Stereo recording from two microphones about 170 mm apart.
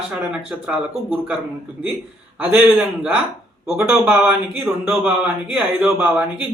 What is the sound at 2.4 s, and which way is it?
A man's voice, 5° right (ahead or behind).